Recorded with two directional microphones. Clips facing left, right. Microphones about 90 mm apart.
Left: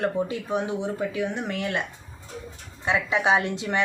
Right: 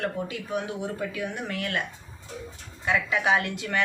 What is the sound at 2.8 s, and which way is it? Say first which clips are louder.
Speech: left 2 dB; 25° left (ahead or behind).